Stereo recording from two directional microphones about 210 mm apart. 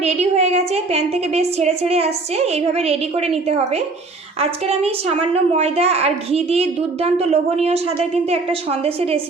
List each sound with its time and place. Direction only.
0.0 s a woman's voice: 30° right (ahead or behind)
4.4 s a woman's voice: 30° right (ahead or behind)